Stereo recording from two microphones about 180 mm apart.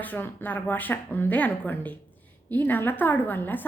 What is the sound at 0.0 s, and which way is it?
Speech, 10° left (ahead or behind).